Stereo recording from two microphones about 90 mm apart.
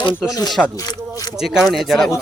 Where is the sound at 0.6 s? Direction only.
10° left (ahead or behind).